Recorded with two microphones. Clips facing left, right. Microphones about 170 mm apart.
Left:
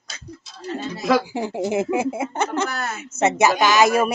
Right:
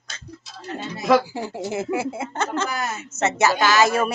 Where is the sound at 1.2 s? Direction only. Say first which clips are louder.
Left 4 dB; 15° left (ahead or behind).